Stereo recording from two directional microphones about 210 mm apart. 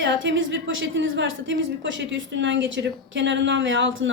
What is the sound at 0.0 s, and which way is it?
A woman's voice, 60° right (ahead or behind).